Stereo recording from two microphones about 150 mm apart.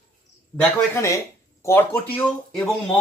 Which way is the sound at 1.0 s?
20° left (ahead or behind).